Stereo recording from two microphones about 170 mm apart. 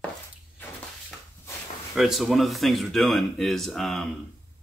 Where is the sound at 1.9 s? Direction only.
Centre (ahead or behind).